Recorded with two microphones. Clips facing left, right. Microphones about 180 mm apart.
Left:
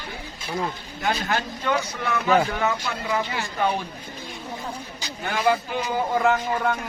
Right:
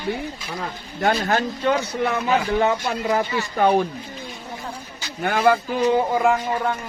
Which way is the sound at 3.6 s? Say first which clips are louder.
Right 7 dB; 55° right (ahead or behind).